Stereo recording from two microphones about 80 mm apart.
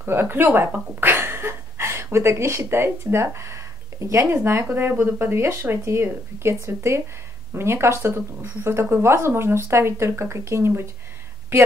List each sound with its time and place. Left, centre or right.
0.0 s speech: right